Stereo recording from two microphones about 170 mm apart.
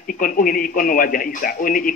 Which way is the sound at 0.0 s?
55° left (ahead or behind).